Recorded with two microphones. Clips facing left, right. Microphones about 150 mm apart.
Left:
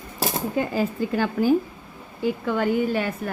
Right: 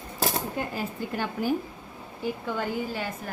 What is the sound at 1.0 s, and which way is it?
Speech, 90° left.